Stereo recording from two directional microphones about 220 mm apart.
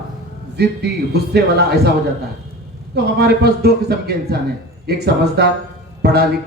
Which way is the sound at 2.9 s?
45° right (ahead or behind).